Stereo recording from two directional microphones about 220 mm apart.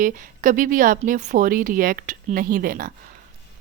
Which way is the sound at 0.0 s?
40° right (ahead or behind).